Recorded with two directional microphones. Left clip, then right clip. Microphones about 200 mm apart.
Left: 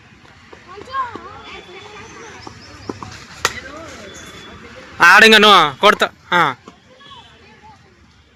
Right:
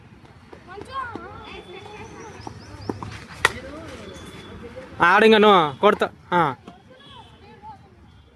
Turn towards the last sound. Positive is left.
turn(degrees=-10)  # may be behind; listen again after turning